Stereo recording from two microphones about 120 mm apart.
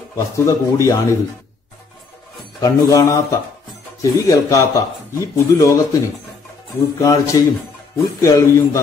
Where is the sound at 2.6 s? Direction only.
25° left (ahead or behind).